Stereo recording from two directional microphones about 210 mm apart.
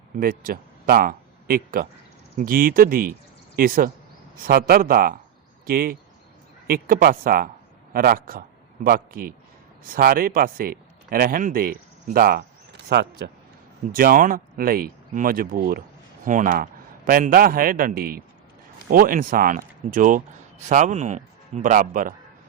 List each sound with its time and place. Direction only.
0.2 s a man's voice: 45° right (ahead or behind)
13.9 s speech: 40° right (ahead or behind)